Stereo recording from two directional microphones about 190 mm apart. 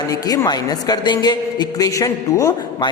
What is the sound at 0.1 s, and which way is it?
A man's voice, 20° left (ahead or behind).